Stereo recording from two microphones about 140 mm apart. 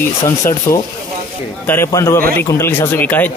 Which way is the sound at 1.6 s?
20° left (ahead or behind).